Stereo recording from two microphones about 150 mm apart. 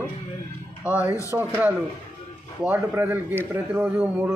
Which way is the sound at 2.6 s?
10° right (ahead or behind).